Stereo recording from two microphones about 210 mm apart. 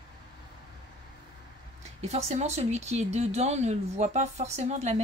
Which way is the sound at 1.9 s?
30° right (ahead or behind).